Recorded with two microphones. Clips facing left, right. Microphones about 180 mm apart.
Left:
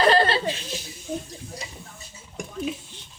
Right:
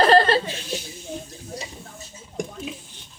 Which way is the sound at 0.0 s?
45° right (ahead or behind).